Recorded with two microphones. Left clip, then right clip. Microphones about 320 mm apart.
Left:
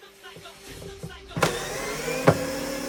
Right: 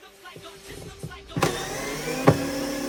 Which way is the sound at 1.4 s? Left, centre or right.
Centre.